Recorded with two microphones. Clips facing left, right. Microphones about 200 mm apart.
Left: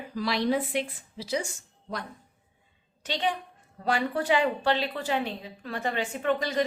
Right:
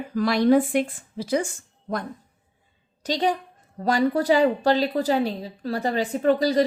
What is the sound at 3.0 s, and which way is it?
A woman's voice, 40° right (ahead or behind).